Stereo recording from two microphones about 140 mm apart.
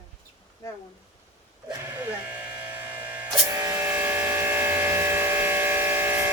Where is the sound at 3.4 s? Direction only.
25° right (ahead or behind).